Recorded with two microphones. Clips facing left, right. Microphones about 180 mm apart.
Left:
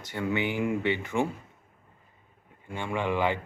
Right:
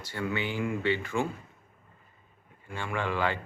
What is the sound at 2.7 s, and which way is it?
Speech, 20° left (ahead or behind).